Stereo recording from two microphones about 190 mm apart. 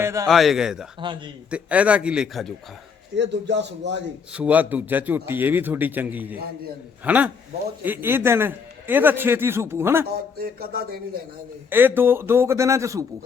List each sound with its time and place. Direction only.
0.0 s speech: 15° right (ahead or behind)
0.3 s a man's voice: centre (ahead or behind)
0.9 s a man's voice: 25° right (ahead or behind)
1.5 s a man's voice: 5° right (ahead or behind)
3.2 s a man's voice: 65° right (ahead or behind)
4.3 s a man's voice: 5° right (ahead or behind)
10.3 s a sound: 55° right (ahead or behind)
11.7 s a man's voice: 10° right (ahead or behind)